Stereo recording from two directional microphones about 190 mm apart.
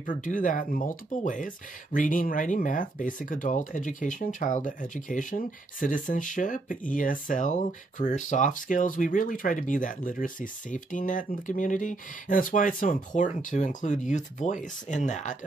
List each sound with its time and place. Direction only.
0.0 s speech: 45° left (ahead or behind)